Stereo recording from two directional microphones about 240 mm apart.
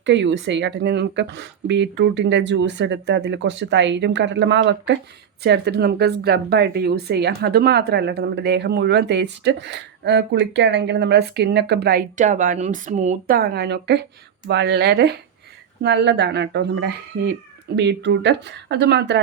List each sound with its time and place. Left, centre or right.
0.0 s a woman's voice: right